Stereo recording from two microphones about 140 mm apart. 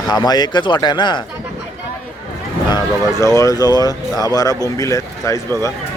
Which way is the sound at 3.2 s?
20° left (ahead or behind).